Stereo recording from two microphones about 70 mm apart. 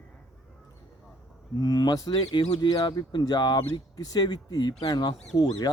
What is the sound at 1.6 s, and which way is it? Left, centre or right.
Speech, left.